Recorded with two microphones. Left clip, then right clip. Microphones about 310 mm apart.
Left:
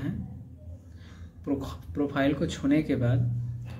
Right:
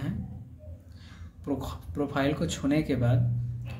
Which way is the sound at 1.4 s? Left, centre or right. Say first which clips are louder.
Left 1 dB; centre.